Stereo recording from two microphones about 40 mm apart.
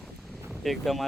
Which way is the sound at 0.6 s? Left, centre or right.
Centre.